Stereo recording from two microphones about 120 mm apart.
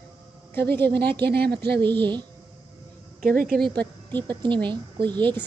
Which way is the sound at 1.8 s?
40° right (ahead or behind).